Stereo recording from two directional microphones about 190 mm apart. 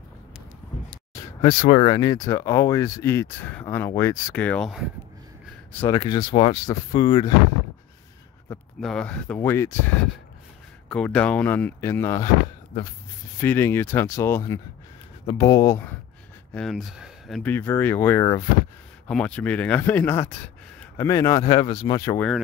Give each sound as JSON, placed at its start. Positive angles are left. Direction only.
{"t": 1.1, "sound": "a sound", "side_deg": 25}
{"t": 1.7, "sound": "speech", "side_deg": 25}
{"t": 5.9, "sound": "speech", "side_deg": 20}
{"t": 8.5, "sound": "speech", "side_deg": 10}
{"t": 10.9, "sound": "speech", "side_deg": 5}
{"t": 13.4, "sound": "speech", "side_deg": 10}
{"t": 16.5, "sound": "speech", "side_deg": 0}
{"t": 17.4, "sound": "speech", "side_deg": 10}
{"t": 19.0, "sound": "speech", "side_deg": 5}